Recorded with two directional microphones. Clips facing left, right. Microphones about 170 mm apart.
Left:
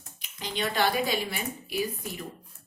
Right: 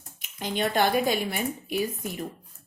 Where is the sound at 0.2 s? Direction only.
50° right (ahead or behind).